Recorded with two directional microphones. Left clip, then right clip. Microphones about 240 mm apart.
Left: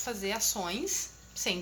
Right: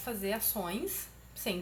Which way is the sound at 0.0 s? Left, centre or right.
Centre.